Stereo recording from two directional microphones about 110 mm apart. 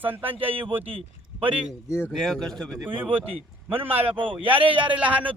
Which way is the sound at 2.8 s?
20° right (ahead or behind).